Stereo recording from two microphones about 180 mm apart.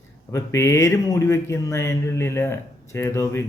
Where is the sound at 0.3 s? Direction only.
15° left (ahead or behind).